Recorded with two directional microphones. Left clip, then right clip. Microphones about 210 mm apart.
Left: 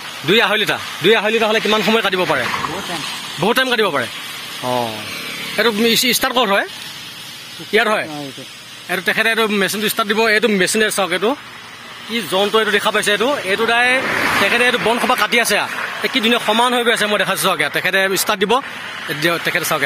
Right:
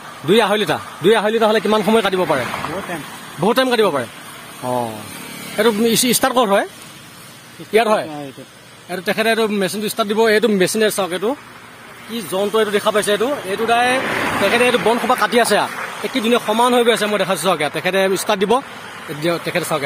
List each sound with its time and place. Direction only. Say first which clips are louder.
0.3 s speech: even; 10° right (ahead or behind)
1.8 s speech: even; 10° right (ahead or behind)
3.4 s speech: right 1 dB; 5° right (ahead or behind)
5.6 s speech: left 1 dB; 10° right (ahead or behind)
7.7 s speech: right 1 dB; 5° left (ahead or behind)
10.1 s speech: right 1 dB; 15° right (ahead or behind)
10.7 s speech: left 1 dB; 5° left (ahead or behind)